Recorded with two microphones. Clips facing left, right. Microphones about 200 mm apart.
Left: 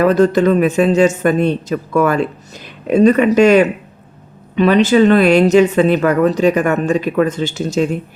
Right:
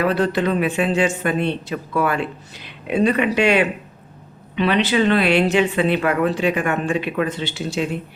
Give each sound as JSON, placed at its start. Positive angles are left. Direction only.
{"t": 0.0, "sound": "a woman's voice", "side_deg": 45}